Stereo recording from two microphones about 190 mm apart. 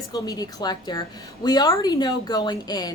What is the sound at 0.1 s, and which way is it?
A woman's voice, 20° left (ahead or behind).